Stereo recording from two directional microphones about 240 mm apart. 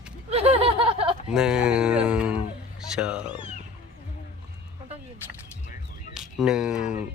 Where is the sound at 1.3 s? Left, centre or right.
Centre.